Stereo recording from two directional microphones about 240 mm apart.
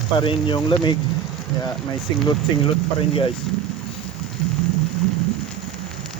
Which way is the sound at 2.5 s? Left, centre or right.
Centre.